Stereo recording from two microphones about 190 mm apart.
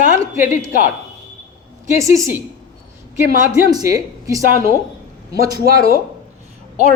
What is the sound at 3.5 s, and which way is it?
Speech, 15° right (ahead or behind).